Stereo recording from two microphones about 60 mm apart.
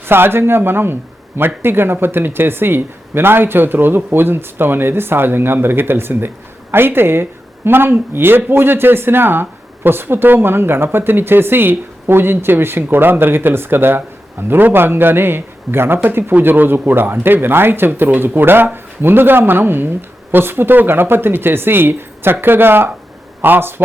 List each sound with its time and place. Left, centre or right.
0.0 s speech: right